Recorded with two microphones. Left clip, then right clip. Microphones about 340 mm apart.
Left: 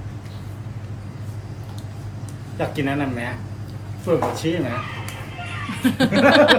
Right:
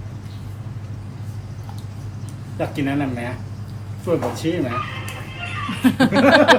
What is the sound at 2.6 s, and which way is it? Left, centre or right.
Speech, centre.